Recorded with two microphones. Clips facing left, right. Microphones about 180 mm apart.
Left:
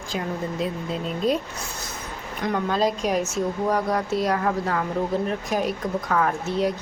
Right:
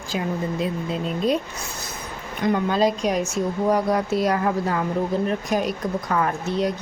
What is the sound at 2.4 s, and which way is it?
Speech, centre (ahead or behind).